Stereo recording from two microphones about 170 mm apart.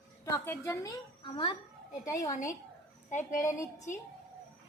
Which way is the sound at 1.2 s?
30° left (ahead or behind).